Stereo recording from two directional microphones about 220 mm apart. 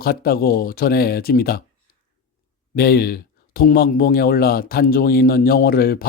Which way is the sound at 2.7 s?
45° left (ahead or behind).